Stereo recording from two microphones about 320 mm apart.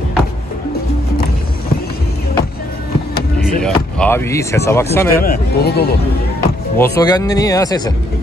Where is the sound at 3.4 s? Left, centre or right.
Centre.